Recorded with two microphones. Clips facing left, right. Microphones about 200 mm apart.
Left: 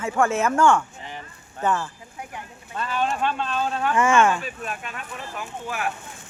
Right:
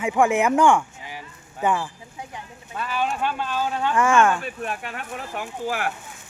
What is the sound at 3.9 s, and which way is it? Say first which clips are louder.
Speech: even; centre (ahead or behind).